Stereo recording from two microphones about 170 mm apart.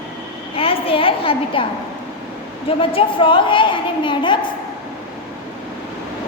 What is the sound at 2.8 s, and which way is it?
A woman's voice, 30° left (ahead or behind).